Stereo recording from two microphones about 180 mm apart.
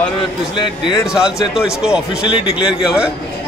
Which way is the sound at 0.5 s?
25° left (ahead or behind).